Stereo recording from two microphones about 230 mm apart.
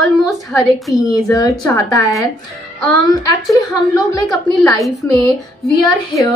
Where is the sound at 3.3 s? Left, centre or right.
Centre.